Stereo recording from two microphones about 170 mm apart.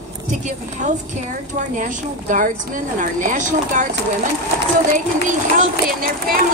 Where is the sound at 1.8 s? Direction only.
50° right (ahead or behind).